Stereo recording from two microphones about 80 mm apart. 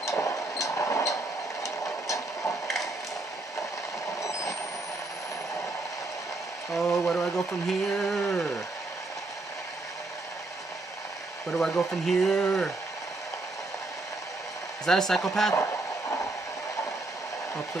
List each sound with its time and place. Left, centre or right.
0.0 s a sound: left
4.2 s vehicle: left
6.7 s speech: centre
11.5 s speech: centre
14.9 s speech: centre
15.5 s a sound: left